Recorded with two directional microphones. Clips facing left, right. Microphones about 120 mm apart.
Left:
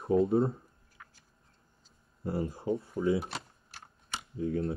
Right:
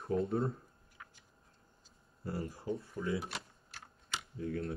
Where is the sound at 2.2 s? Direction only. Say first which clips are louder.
Left 6 dB; 25° left (ahead or behind).